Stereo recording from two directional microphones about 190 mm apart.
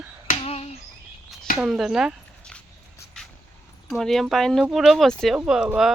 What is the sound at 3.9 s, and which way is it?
Speech, centre (ahead or behind).